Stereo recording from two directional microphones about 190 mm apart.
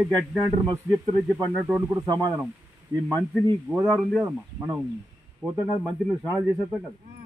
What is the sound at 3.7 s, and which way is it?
Speech, 10° right (ahead or behind).